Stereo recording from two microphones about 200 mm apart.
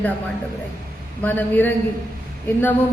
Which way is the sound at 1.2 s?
10° left (ahead or behind).